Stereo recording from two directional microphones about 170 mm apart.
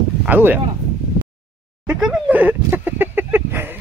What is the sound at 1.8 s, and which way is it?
Speech, 5° right (ahead or behind).